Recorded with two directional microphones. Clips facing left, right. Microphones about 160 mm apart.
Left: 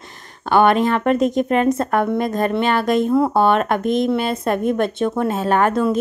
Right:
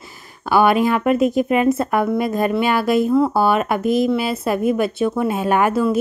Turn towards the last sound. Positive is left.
turn(degrees=-5)  # may be behind; listen again after turning